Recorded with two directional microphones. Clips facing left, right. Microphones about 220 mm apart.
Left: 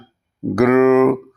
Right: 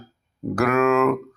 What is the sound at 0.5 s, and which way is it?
Speech, 20° left (ahead or behind).